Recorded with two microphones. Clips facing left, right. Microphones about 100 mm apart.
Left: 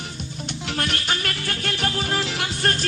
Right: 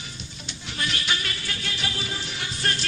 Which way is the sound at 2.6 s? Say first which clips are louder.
Left 4 dB; 50° left (ahead or behind).